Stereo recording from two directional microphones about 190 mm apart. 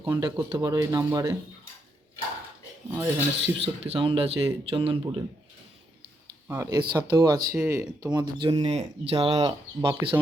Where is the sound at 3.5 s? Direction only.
30° right (ahead or behind).